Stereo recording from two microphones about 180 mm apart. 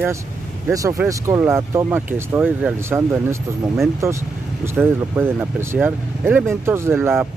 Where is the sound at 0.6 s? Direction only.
15° right (ahead or behind).